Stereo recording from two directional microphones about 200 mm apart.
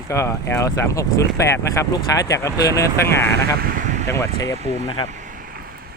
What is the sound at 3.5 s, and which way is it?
Speech, 45° right (ahead or behind).